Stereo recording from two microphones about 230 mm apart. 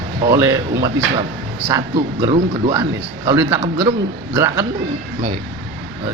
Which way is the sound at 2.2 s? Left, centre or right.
Right.